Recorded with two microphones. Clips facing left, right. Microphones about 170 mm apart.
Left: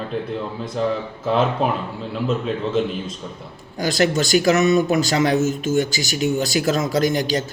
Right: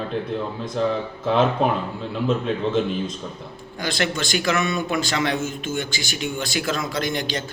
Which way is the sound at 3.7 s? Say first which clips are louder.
Left 6 dB; 40° left (ahead or behind).